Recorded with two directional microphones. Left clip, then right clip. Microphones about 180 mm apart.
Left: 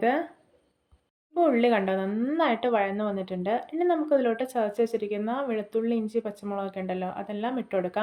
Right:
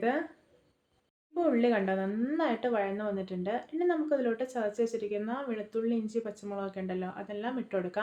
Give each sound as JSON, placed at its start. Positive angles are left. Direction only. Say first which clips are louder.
{"t": 1.3, "sound": "speech", "louder": "left 5 dB", "side_deg": 25}